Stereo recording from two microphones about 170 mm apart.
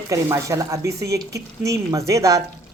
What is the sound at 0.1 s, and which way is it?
Speech, 20° right (ahead or behind).